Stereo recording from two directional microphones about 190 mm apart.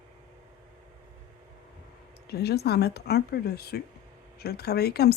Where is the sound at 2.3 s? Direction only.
60° left (ahead or behind).